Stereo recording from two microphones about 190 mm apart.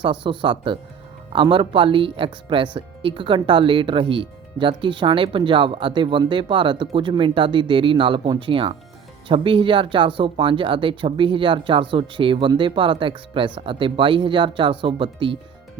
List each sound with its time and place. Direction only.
0.0 s speech: 25° right (ahead or behind)